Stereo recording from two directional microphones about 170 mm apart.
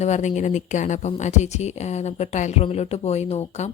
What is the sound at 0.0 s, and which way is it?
Speech, 45° left (ahead or behind).